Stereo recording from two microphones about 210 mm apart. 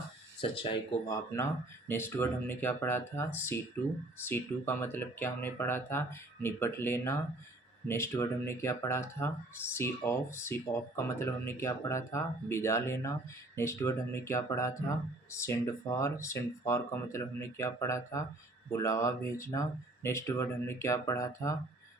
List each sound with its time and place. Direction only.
0.4 s speech: 25° left (ahead or behind)